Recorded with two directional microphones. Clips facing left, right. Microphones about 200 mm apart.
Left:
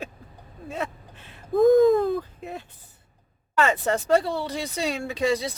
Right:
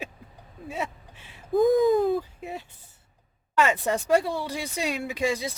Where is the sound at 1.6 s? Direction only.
Centre (ahead or behind).